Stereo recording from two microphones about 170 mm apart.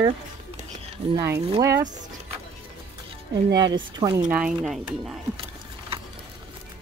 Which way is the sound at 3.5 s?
20° right (ahead or behind).